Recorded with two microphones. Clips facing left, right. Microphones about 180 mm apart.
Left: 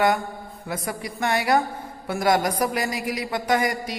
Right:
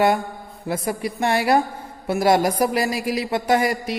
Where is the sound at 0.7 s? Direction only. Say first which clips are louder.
Right 6 dB; 25° right (ahead or behind).